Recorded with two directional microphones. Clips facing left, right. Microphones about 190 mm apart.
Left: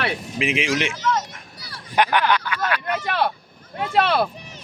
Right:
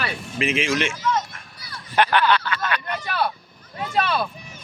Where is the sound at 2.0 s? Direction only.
15° left (ahead or behind).